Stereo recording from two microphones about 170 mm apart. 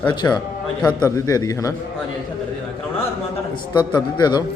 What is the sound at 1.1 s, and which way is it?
Speech, 20° left (ahead or behind).